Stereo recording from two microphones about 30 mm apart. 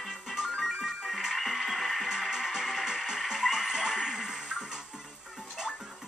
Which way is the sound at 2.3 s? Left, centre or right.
Centre.